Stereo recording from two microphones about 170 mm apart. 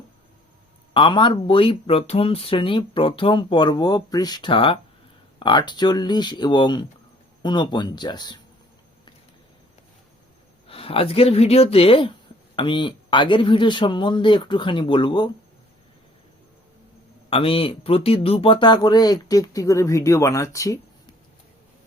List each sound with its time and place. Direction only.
0.9 s speech: 30° left (ahead or behind)
10.7 s speech: 35° left (ahead or behind)
17.2 s speech: 30° left (ahead or behind)